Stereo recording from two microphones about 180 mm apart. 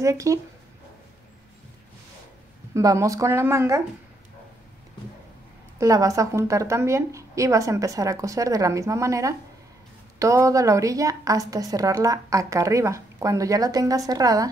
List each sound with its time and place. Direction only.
0.0 s a woman's voice: 15° right (ahead or behind)
2.7 s a woman's voice: 20° right (ahead or behind)
5.8 s a woman's voice: 20° right (ahead or behind)